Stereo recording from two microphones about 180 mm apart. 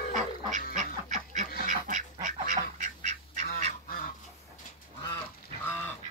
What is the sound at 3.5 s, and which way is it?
Goose, 55° left (ahead or behind).